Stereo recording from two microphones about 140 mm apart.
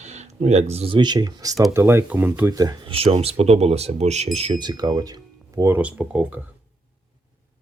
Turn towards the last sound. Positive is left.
turn(degrees=-10)  # may be behind; listen again after turning